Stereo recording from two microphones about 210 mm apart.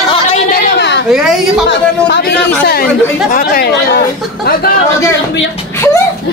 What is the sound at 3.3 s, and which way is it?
Speech, 45° left (ahead or behind).